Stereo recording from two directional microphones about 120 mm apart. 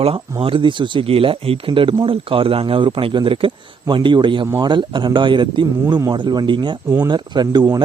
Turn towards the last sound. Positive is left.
turn(degrees=-35)  # may be behind; listen again after turning